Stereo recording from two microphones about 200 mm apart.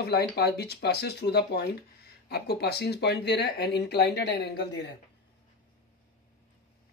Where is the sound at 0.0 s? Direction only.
55° left (ahead or behind).